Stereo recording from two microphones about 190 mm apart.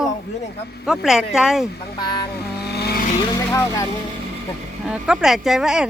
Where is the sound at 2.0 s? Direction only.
25° left (ahead or behind).